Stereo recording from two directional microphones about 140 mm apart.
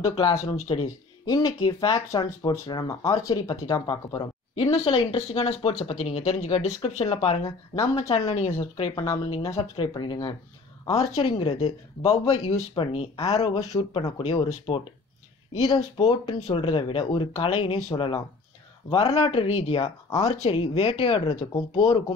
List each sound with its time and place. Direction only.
0.0 s speech: 45° left (ahead or behind)
1.2 s speech: 25° left (ahead or behind); by 8.9 s 45° left (ahead or behind)
8.9 s speech: 25° left (ahead or behind)
9.6 s speech: 35° left (ahead or behind)
11.0 s speech: 45° left (ahead or behind)
13.7 s speech: 30° left (ahead or behind)
14.1 s speech: 45° left (ahead or behind)
15.6 s speech: 30° left (ahead or behind)
16.5 s speech: 40° left (ahead or behind)
20.1 s speech: 25° left (ahead or behind)
20.4 s speech: 45° left (ahead or behind)